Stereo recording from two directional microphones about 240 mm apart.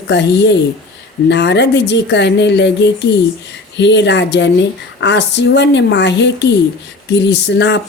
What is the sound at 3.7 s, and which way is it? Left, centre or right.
Speech, left.